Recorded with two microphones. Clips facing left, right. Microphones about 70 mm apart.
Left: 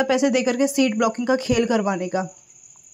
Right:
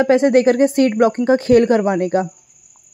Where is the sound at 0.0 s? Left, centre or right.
Right.